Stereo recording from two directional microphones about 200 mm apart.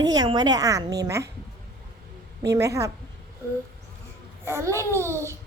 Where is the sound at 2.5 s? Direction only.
15° right (ahead or behind).